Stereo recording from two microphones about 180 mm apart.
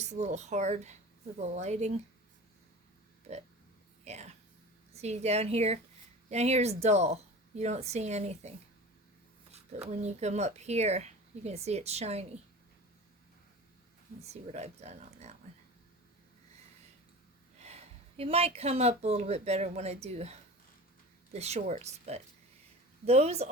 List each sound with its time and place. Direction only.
0.0 s speech: 40° right (ahead or behind)
4.0 s a sound: 40° right (ahead or behind)
4.9 s speech: 35° right (ahead or behind)
9.8 s speech: 40° right (ahead or behind)
14.2 s speech: 35° right (ahead or behind)
17.6 s speech: 35° right (ahead or behind)
21.3 s speech: 35° right (ahead or behind)